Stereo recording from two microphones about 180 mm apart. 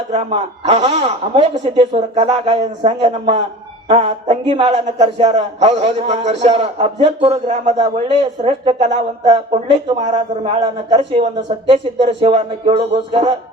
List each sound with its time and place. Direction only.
0.1 s a man's voice: 35° right (ahead or behind)
7.8 s a man's voice: 30° right (ahead or behind)
10.1 s speech: 25° right (ahead or behind)